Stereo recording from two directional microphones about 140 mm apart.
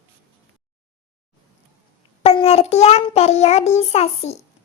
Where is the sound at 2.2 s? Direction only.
45° left (ahead or behind).